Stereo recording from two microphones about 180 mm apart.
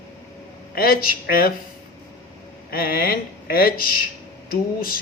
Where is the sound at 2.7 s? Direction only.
55° left (ahead or behind).